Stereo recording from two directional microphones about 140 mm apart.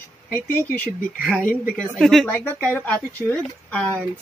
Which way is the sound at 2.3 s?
10° left (ahead or behind).